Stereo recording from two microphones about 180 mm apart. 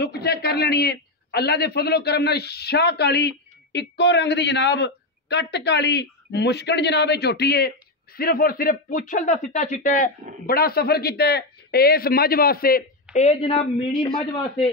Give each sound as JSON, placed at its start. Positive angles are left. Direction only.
{"t": 0.0, "sound": "a man's voice", "side_deg": 65}
{"t": 13.1, "sound": "a woman's voice", "side_deg": 35}